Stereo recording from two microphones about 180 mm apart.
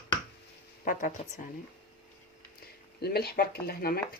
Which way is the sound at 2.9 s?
60° left (ahead or behind).